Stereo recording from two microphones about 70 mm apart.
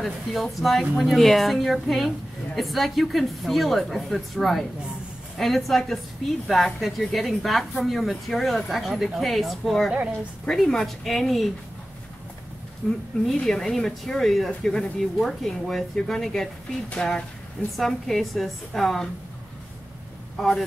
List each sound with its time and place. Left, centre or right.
0.0 s speech: centre
12.8 s speech: centre
13.3 s speech: centre
20.4 s speech: centre